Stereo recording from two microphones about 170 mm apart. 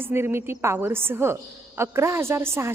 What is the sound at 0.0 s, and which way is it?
A woman's voice, 15° right (ahead or behind).